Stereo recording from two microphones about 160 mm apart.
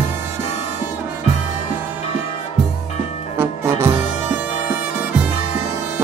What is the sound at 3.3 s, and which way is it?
Music, 15° right (ahead or behind).